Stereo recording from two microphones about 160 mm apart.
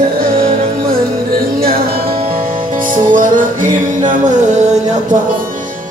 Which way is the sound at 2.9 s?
55° right (ahead or behind).